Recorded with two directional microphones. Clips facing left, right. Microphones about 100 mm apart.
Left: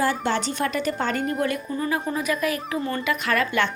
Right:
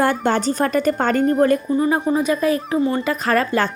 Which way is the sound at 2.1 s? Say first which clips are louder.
Right 7 dB; 30° right (ahead or behind).